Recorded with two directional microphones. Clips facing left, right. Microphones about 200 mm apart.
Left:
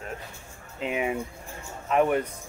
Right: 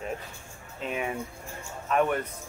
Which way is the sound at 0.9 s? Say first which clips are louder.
Left 4 dB; 15° left (ahead or behind).